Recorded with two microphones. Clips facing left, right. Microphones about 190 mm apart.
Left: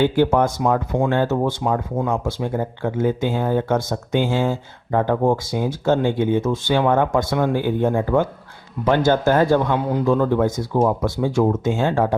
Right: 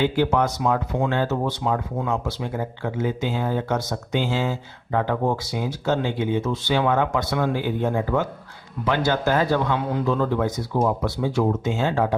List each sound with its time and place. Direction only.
0.0 s speech: 50° left (ahead or behind)